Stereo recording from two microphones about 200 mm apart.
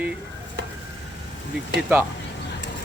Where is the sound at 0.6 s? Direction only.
55° right (ahead or behind).